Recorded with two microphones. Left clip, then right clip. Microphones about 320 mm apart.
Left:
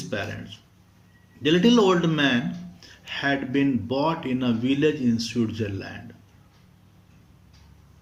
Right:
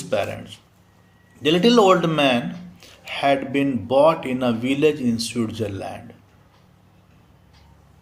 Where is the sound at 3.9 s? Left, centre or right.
Centre.